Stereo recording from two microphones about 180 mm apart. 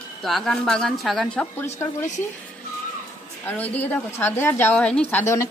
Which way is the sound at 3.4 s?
10° left (ahead or behind).